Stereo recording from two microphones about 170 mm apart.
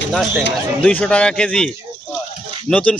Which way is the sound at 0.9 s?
5° left (ahead or behind).